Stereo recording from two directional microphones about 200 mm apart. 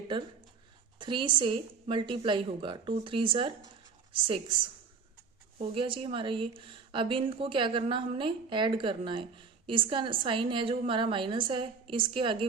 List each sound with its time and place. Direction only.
0.1 s speech: 25° right (ahead or behind)
5.5 s speech: 25° right (ahead or behind)